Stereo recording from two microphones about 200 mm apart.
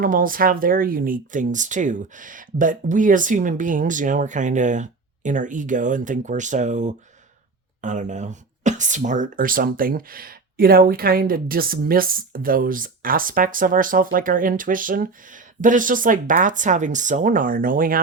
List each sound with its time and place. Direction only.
0.0 s speech: 45° right (ahead or behind)